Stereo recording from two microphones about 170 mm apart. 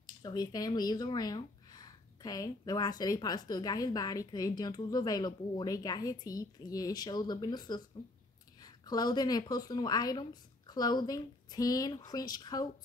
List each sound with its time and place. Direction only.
0.0 s a woman's voice: 20° left (ahead or behind)